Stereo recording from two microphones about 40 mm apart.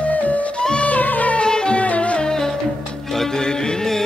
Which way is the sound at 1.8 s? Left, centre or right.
Left.